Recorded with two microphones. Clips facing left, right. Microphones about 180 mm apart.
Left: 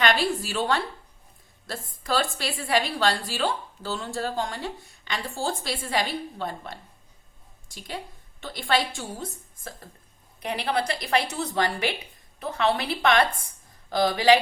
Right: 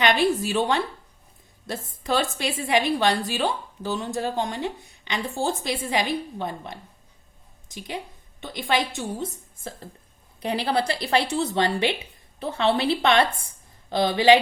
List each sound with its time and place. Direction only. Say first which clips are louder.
0.0 s a woman's voice: right 3 dB; 20° right (ahead or behind)